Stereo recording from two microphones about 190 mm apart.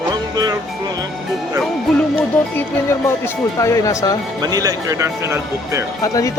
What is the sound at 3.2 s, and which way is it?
Speech, 15° left (ahead or behind).